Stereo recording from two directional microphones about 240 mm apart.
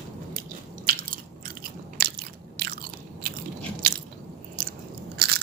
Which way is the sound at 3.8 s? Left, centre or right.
Right.